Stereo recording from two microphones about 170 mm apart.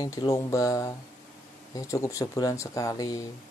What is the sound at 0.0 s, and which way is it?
Speech, 20° left (ahead or behind).